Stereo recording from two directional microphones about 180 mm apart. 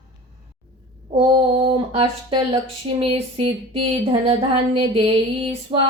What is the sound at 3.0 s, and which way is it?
Speech, 30° right (ahead or behind).